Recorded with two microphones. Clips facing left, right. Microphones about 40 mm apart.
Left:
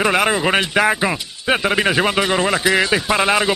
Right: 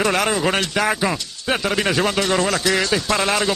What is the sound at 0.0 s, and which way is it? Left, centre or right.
Speech, left.